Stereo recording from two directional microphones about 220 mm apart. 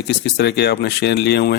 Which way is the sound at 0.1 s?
50° left (ahead or behind).